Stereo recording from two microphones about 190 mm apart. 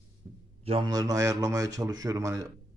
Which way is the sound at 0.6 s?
25° right (ahead or behind).